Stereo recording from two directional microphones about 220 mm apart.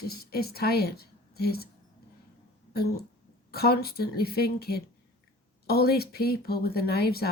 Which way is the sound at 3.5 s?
45° left (ahead or behind).